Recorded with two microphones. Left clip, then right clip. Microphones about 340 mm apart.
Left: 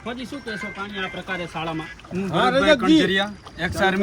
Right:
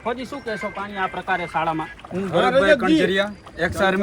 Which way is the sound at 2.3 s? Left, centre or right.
Left.